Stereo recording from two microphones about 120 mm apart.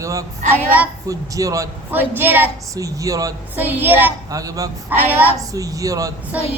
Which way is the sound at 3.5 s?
15° right (ahead or behind).